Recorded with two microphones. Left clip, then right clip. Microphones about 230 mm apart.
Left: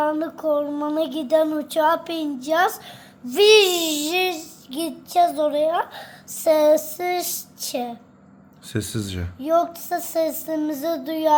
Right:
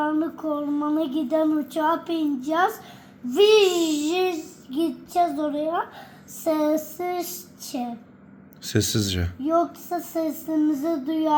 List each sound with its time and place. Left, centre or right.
0.0 s speech: centre
8.6 s speech: centre
9.4 s speech: centre